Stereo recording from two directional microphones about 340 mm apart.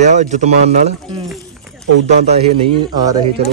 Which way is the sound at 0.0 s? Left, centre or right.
Right.